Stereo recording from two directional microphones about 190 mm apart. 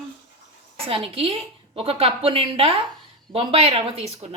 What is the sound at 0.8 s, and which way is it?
A woman's voice, 30° right (ahead or behind).